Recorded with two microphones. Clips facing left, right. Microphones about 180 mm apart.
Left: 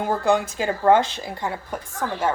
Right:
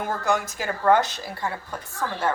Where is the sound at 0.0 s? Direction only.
20° left (ahead or behind).